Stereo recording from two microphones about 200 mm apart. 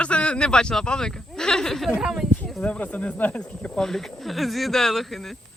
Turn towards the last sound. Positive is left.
turn(degrees=0)  # may be behind; listen again after turning